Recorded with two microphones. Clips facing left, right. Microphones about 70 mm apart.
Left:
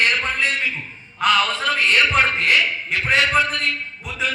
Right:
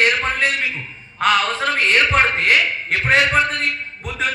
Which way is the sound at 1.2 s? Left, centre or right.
Right.